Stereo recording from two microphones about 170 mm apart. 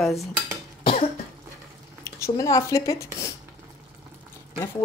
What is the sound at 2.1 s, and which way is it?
A woman's voice, 20° left (ahead or behind).